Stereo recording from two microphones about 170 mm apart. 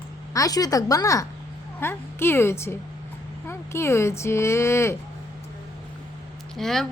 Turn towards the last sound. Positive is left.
turn(degrees=0)  # may be behind; listen again after turning